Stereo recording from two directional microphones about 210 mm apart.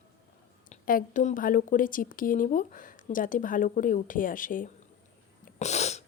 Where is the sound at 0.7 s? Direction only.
40° left (ahead or behind).